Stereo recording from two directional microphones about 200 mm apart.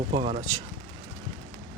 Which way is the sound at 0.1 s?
30° right (ahead or behind).